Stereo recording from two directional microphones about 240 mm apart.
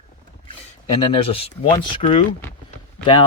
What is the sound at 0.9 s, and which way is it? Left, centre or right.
Speech, left.